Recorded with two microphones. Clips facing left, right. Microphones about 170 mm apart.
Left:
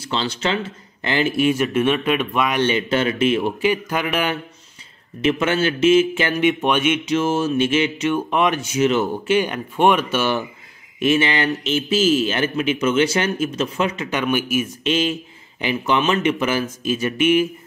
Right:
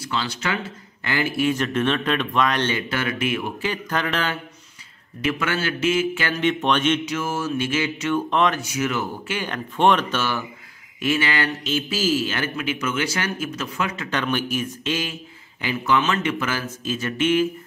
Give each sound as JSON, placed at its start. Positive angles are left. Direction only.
{"t": 0.0, "sound": "speech", "side_deg": 25}
{"t": 3.5, "sound": "speech", "side_deg": 15}
{"t": 7.1, "sound": "speech", "side_deg": 25}
{"t": 14.9, "sound": "speech", "side_deg": 20}